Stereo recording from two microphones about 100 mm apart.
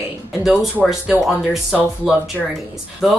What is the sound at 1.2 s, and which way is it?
Speech, 5° right (ahead or behind).